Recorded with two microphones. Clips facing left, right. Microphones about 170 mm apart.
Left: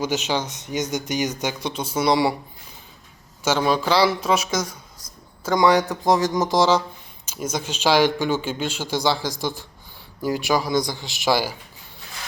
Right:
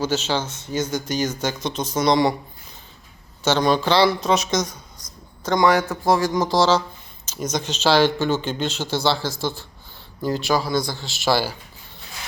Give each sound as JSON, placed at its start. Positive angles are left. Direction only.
{"t": 0.0, "sound": "speech", "side_deg": 15}
{"t": 3.4, "sound": "speech", "side_deg": 10}